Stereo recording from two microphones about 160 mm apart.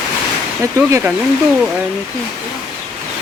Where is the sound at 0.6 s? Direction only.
15° right (ahead or behind).